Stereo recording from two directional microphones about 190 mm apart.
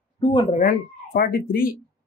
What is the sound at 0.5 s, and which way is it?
Speech, 50° left (ahead or behind).